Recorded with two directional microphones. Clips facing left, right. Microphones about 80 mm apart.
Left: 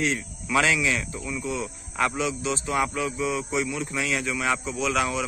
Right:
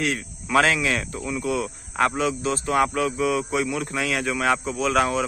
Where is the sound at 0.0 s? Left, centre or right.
Right.